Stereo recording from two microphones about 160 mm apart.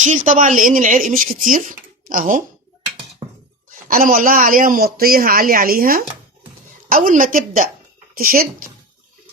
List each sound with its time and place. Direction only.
0.0 s speech: 50° right (ahead or behind)
3.7 s speech: 60° right (ahead or behind)